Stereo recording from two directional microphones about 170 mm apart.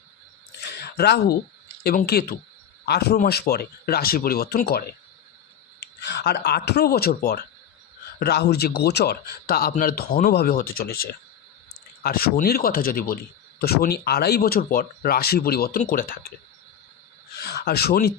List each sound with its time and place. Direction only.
0.6 s a sound: 75° left (ahead or behind)
1.8 s speech: 65° left (ahead or behind)
5.8 s speech: 80° left; by 7.4 s 60° left (ahead or behind)
8.2 s speech: 75° left (ahead or behind); by 16.3 s 55° left (ahead or behind)
17.4 s speech: 70° left (ahead or behind)